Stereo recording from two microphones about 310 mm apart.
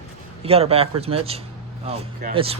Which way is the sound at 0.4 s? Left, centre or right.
Centre.